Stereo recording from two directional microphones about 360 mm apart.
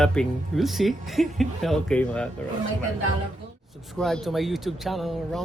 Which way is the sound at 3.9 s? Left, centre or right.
Centre.